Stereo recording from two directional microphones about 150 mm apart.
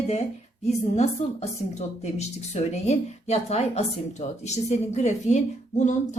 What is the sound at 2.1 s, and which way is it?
A woman's voice, 50° left (ahead or behind).